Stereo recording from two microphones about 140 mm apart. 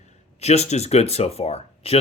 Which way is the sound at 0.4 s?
50° left (ahead or behind).